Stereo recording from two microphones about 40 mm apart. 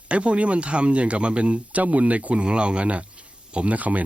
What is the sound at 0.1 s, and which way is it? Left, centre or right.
Speech, right.